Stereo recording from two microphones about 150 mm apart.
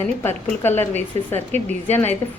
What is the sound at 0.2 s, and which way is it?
A woman's voice, 15° left (ahead or behind).